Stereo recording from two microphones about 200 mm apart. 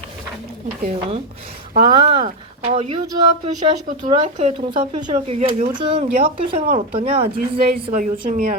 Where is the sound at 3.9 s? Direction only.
35° right (ahead or behind).